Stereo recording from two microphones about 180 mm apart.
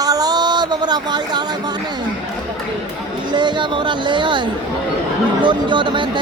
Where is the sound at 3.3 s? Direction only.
25° right (ahead or behind).